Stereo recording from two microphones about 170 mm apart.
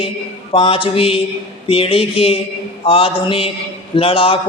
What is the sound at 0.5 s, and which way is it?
Speech, 30° left (ahead or behind).